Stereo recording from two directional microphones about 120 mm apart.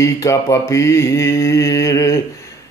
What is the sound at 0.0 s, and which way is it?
Speech, 25° left (ahead or behind).